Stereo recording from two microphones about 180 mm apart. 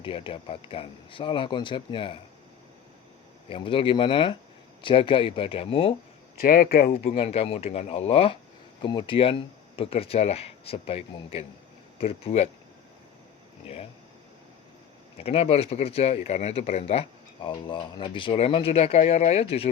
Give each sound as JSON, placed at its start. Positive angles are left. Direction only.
{"t": 0.0, "sound": "speech", "side_deg": 30}
{"t": 3.5, "sound": "speech", "side_deg": 30}
{"t": 6.4, "sound": "speech", "side_deg": 55}
{"t": 7.2, "sound": "speech", "side_deg": 35}
{"t": 15.2, "sound": "speech", "side_deg": 35}